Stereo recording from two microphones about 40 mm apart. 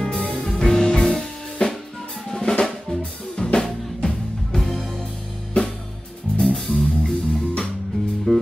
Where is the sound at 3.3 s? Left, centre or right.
Centre.